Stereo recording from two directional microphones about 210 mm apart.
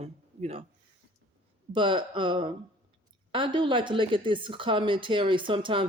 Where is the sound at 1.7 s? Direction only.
25° right (ahead or behind).